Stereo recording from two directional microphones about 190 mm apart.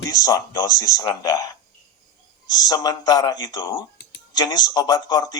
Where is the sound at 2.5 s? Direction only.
20° left (ahead or behind).